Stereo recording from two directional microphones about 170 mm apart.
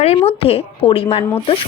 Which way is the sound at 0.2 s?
35° left (ahead or behind).